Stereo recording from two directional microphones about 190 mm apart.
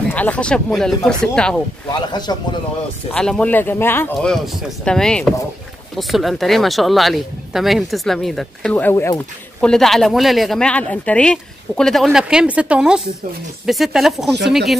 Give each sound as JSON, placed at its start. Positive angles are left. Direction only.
{"t": 0.1, "sound": "speech", "side_deg": 10}
{"t": 1.9, "sound": "speech", "side_deg": 20}
{"t": 3.1, "sound": "speech", "side_deg": 5}
{"t": 9.7, "sound": "speech", "side_deg": 0}